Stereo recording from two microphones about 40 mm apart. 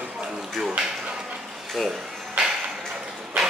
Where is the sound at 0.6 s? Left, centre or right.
Centre.